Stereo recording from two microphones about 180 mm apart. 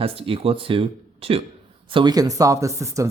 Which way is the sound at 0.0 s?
30° right (ahead or behind).